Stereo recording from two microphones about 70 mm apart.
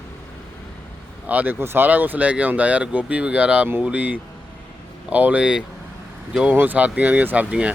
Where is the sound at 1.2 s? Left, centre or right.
Right.